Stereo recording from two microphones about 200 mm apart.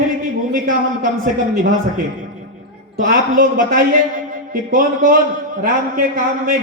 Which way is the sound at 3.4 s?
45° right (ahead or behind).